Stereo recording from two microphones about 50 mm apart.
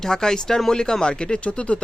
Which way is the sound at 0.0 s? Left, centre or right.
Centre.